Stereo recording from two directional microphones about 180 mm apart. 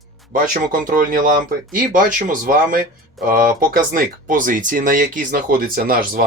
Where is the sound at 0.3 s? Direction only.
50° right (ahead or behind).